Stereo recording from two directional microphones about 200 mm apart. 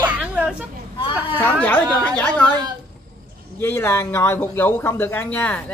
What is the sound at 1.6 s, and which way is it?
Speech, 5° left (ahead or behind).